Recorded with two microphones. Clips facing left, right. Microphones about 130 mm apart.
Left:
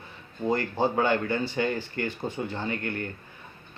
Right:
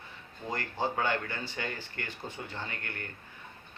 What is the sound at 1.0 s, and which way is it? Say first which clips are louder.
Speech: left 7 dB; 25° left (ahead or behind).